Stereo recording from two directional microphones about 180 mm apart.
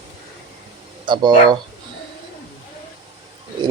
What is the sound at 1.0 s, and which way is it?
Speech, 25° right (ahead or behind).